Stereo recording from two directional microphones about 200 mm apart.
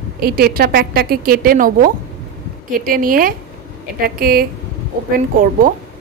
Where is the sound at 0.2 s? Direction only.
50° right (ahead or behind).